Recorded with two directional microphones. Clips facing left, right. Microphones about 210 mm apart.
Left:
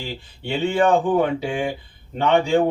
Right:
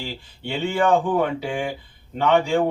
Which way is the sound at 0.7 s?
30° left (ahead or behind).